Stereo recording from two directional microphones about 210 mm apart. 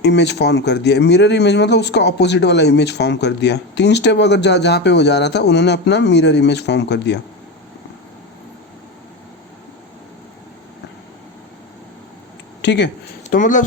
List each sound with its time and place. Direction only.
0.0 s speech: 55° left (ahead or behind)
12.6 s speech: 55° left (ahead or behind)
13.3 s speech: 40° left (ahead or behind)